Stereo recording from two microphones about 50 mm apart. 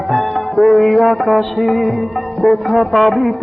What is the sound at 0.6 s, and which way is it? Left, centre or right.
Music, centre.